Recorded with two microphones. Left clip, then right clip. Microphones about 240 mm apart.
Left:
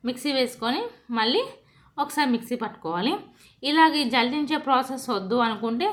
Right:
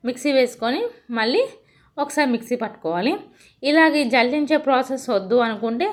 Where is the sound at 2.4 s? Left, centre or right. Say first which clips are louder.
Right 5 dB; centre.